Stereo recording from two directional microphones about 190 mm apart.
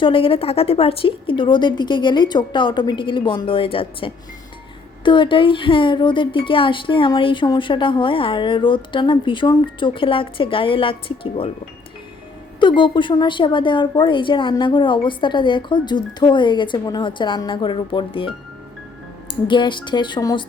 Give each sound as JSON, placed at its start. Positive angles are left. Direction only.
{"t": 0.0, "sound": "a woman's voice", "side_deg": 30}
{"t": 12.5, "sound": "a woman's voice", "side_deg": 25}